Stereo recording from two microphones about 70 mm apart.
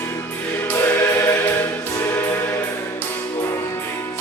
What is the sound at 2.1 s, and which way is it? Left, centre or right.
Music, left.